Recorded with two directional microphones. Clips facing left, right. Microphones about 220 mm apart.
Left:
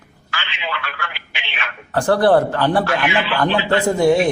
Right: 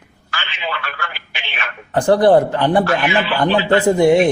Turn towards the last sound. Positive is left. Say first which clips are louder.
# right 3 dB
turn(degrees=-20)  # may be behind; listen again after turning